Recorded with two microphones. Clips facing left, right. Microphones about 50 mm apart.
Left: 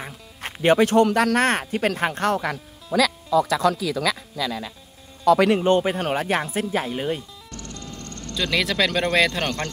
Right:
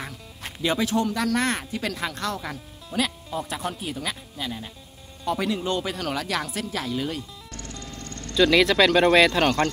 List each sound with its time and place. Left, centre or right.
0.4 s a man's voice: left
3.3 s speech: left
5.2 s speech: left
5.6 s speech: left
8.4 s a man's voice: centre